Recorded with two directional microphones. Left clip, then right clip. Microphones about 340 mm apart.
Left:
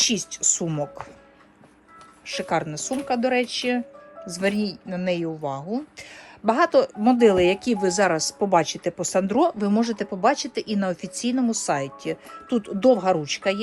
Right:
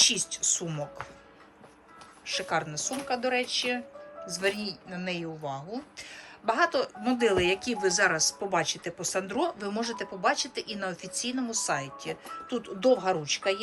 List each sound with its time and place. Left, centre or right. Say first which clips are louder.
0.0 s speech: left 2 dB; centre
2.2 s a man's voice: left 5 dB; centre